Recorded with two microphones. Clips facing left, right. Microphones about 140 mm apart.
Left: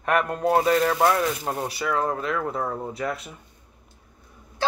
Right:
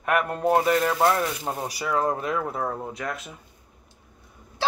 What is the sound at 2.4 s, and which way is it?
Speech, centre (ahead or behind).